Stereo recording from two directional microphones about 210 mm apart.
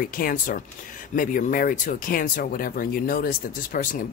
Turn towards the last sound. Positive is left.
turn(degrees=40)  # may be behind; listen again after turning